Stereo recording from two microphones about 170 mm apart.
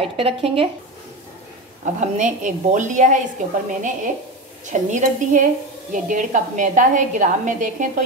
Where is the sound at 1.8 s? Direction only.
45° right (ahead or behind).